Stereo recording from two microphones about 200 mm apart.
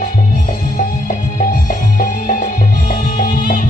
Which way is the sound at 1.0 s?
45° left (ahead or behind).